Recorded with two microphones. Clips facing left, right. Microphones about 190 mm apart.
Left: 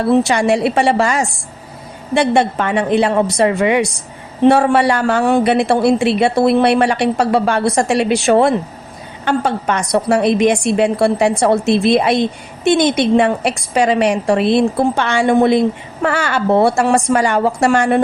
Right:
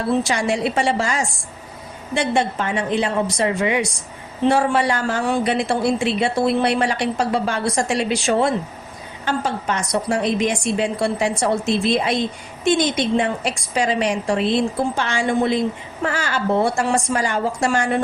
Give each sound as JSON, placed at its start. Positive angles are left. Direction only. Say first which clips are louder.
{"t": 0.1, "sound": "a woman's voice", "louder": "left 7 dB", "side_deg": 65}